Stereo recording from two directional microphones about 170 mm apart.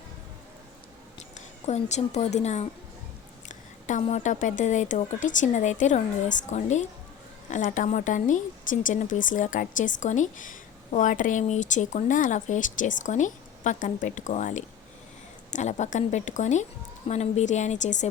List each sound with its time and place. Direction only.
1.6 s a woman's voice: 40° left (ahead or behind)
3.5 s a sound: 45° left (ahead or behind)
4.0 s speech: 45° left (ahead or behind)